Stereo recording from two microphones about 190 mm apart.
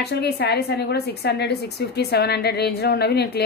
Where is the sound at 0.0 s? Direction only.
60° left (ahead or behind).